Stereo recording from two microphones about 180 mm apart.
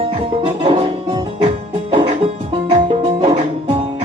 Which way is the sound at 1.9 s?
35° right (ahead or behind).